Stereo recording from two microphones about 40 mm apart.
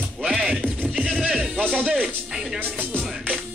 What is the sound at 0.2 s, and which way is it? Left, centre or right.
Music, centre.